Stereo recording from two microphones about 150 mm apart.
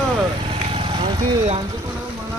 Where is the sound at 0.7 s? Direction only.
35° right (ahead or behind).